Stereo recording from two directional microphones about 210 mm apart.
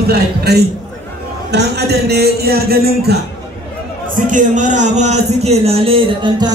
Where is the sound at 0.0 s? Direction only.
50° right (ahead or behind).